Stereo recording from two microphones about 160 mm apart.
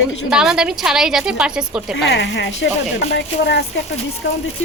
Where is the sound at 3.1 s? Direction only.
90° left.